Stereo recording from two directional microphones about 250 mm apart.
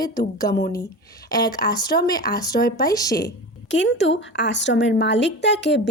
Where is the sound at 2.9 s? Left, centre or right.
Centre.